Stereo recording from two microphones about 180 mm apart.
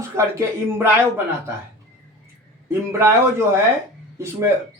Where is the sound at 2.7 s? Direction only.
15° right (ahead or behind).